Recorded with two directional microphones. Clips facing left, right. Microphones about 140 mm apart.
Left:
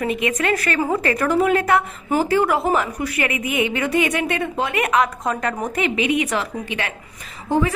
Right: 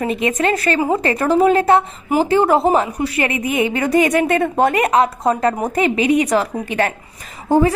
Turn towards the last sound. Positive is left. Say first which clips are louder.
# right 6 dB
turn(degrees=-40)  # may be behind; listen again after turning